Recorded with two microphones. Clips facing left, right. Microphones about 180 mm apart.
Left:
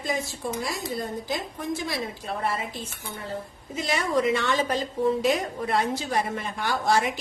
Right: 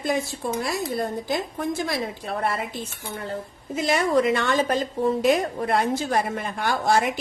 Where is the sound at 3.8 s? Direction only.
55° right (ahead or behind).